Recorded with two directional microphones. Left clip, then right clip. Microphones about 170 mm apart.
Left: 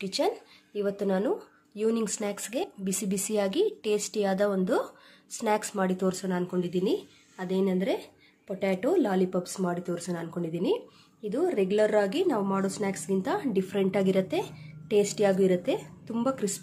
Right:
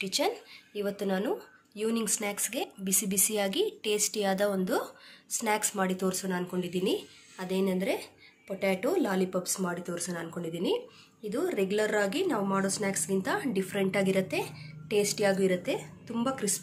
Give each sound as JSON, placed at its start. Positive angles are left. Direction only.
{"t": 0.0, "sound": "speech", "side_deg": 45}